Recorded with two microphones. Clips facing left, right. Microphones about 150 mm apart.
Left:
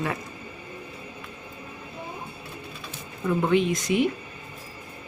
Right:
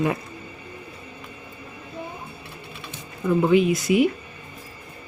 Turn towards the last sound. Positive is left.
turn(degrees=-5)  # may be behind; listen again after turning